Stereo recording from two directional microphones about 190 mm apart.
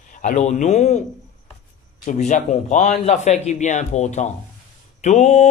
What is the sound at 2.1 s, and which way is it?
A man's voice, 40° left (ahead or behind).